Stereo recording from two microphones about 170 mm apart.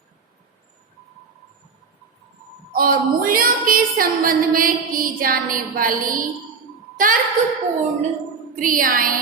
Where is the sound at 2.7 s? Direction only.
60° right (ahead or behind).